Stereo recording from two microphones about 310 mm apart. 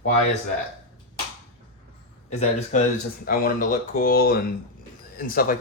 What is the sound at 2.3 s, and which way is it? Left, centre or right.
Speech, left.